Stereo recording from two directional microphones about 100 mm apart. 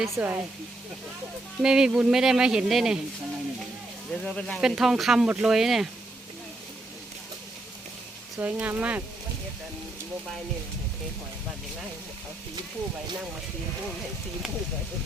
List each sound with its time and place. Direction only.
0.1 s speech: 20° right (ahead or behind)
1.6 s speech: 5° right (ahead or behind)
4.1 s speech: 10° left (ahead or behind)
4.6 s speech: 5° right (ahead or behind)
8.4 s speech: 15° right (ahead or behind)